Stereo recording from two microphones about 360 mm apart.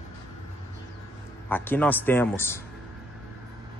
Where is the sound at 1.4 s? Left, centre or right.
Centre.